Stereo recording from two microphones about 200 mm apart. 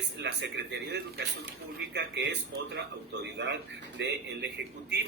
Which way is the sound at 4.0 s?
60° right (ahead or behind).